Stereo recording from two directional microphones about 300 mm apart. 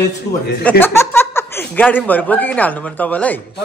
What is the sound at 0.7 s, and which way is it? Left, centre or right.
Speech, centre.